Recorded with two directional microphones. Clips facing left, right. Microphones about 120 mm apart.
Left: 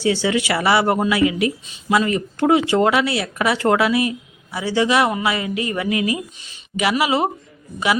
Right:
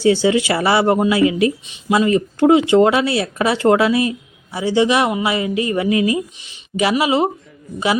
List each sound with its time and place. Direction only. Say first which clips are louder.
0.0 s speech: right 5 dB; 25° right (ahead or behind)